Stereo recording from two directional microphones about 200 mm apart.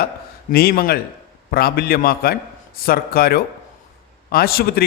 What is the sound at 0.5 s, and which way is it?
A man's voice, 50° left (ahead or behind).